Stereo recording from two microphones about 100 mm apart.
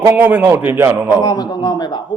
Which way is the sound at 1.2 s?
45° left (ahead or behind).